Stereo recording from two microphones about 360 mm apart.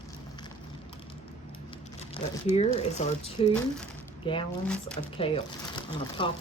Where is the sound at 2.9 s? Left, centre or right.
Centre.